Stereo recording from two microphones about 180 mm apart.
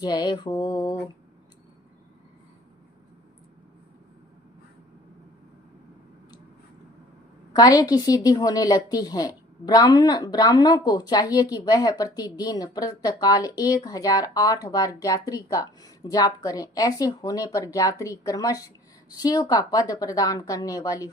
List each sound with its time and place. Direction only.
0.0 s a woman's voice: 25° left (ahead or behind)
7.5 s a woman's voice: 20° left (ahead or behind)